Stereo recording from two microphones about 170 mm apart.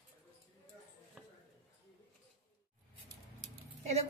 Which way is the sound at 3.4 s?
40° right (ahead or behind).